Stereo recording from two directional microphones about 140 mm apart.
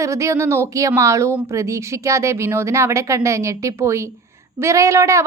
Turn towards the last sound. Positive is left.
turn(degrees=-20)  # may be behind; listen again after turning